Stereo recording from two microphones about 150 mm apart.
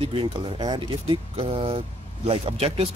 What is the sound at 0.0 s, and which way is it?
Speech, 40° right (ahead or behind).